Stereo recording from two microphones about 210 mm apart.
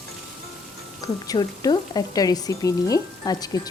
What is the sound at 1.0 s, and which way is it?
Speech, 20° left (ahead or behind).